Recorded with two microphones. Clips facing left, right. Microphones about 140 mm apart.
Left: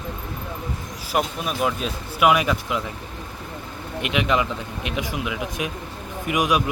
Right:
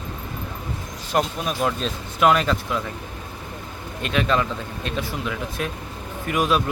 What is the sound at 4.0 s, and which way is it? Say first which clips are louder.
Speech: even; 15° left (ahead or behind).